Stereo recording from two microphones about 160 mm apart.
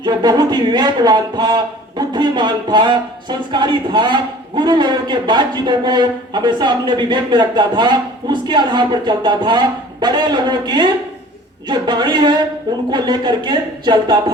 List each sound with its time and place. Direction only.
0.0 s speech: 25° right (ahead or behind)